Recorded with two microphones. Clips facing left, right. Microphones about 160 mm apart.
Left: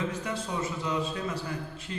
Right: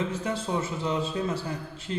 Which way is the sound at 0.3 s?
25° right (ahead or behind).